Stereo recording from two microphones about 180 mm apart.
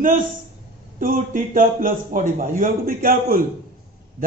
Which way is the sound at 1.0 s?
45° right (ahead or behind).